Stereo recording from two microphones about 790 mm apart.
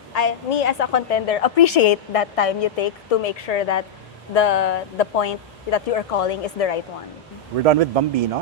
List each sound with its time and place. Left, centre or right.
0.1 s a woman's voice: left
7.6 s a man's voice: right